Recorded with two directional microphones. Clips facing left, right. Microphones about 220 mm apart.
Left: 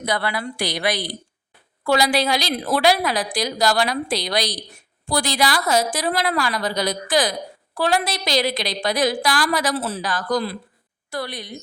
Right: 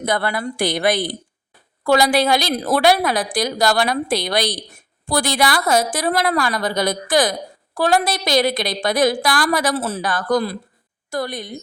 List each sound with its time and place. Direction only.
0.0 s a woman's voice: 50° right (ahead or behind)